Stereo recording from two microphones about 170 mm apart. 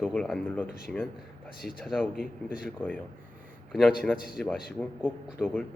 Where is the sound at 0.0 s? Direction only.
5° left (ahead or behind).